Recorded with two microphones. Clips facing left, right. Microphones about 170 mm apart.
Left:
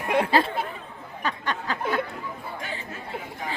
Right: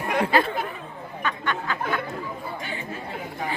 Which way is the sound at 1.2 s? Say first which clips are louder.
Right 1 dB; 35° left (ahead or behind).